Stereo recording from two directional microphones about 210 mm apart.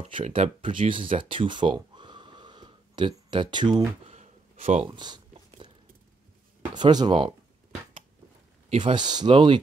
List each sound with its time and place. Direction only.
0.0 s speech: 30° right (ahead or behind)
4.1 s a sound: 30° right (ahead or behind)
6.7 s speech: 20° right (ahead or behind)
8.6 s speech: 25° right (ahead or behind)